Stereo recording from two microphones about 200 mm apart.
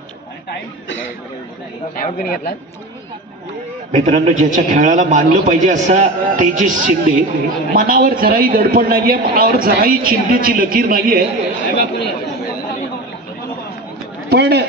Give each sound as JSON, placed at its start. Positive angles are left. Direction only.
{"t": 2.0, "sound": "speech", "side_deg": 45}
{"t": 3.9, "sound": "a man's voice", "side_deg": -35}
{"t": 14.3, "sound": "chatter", "side_deg": -55}